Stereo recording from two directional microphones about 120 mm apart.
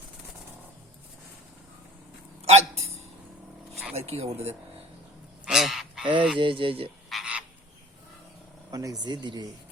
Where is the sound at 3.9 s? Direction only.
60° right (ahead or behind).